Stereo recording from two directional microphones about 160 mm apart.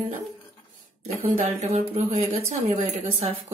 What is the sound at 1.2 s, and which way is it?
Speech, 40° right (ahead or behind).